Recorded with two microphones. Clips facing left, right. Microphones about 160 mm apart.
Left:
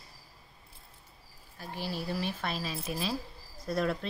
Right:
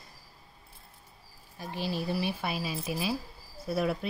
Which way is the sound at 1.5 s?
15° right (ahead or behind).